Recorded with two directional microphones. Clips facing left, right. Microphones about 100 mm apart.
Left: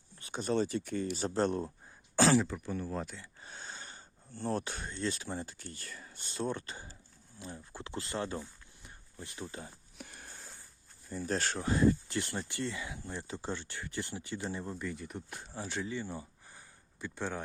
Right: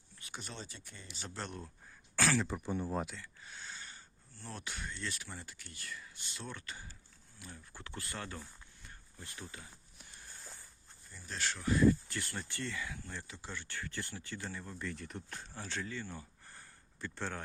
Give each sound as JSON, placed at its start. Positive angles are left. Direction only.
{"t": 0.2, "sound": "a sound", "side_deg": 35}
{"t": 0.5, "sound": "speech", "side_deg": 60}
{"t": 2.1, "sound": "speech", "side_deg": 25}
{"t": 2.5, "sound": "speech", "side_deg": -15}
{"t": 3.4, "sound": "speech", "side_deg": 35}
{"t": 10.0, "sound": "a sound", "side_deg": 65}
{"t": 11.1, "sound": "speech", "side_deg": 40}
{"t": 13.2, "sound": "speech", "side_deg": 35}
{"t": 14.8, "sound": "speech", "side_deg": 5}